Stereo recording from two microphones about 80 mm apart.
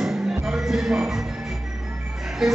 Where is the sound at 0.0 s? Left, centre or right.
Centre.